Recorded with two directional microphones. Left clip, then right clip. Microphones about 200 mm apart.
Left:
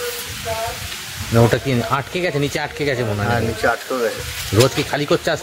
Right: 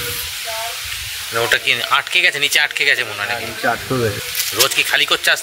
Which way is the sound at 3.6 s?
30° left (ahead or behind).